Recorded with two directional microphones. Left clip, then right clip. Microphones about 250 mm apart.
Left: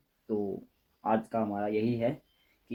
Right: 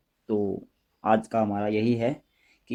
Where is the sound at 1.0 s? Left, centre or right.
Right.